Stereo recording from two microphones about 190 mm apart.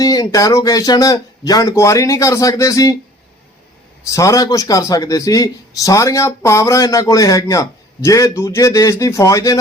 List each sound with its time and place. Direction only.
0.0 s a man's voice: 20° left (ahead or behind)
4.0 s a man's voice: 15° left (ahead or behind)